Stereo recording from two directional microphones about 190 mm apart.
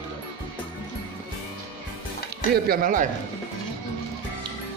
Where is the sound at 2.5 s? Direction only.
50° right (ahead or behind).